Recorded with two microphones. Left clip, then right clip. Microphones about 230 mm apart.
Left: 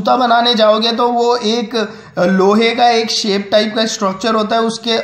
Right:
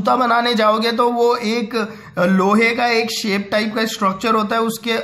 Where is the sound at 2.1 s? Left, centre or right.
Right.